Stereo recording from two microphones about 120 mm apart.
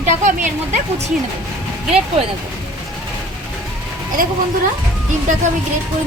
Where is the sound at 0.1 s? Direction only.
85° right.